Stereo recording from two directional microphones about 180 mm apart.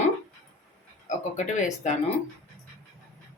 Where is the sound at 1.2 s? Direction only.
40° left (ahead or behind).